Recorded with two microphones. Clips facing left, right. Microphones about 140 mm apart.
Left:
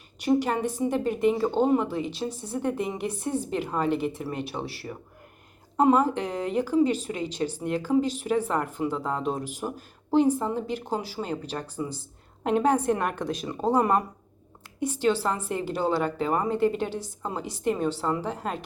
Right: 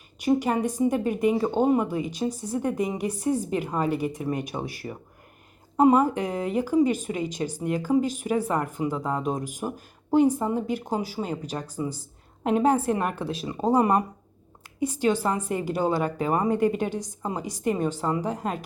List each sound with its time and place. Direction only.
0.2 s a woman's voice: 10° right (ahead or behind)
9.6 s a woman's voice: 20° right (ahead or behind)
15.2 s a woman's voice: 15° right (ahead or behind)